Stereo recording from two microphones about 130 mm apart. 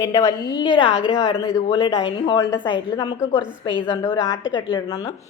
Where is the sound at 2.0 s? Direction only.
45° left (ahead or behind).